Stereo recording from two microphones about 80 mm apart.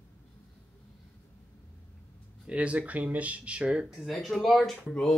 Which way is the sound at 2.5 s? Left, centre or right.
Centre.